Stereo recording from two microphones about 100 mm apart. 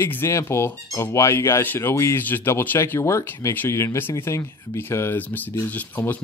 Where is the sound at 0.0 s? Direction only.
25° left (ahead or behind).